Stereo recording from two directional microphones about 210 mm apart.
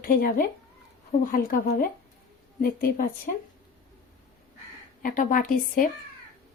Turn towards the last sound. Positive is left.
turn(degrees=40)  # may be behind; listen again after turning